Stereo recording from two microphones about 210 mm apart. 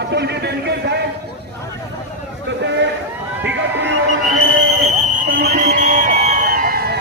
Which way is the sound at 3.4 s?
55° right (ahead or behind).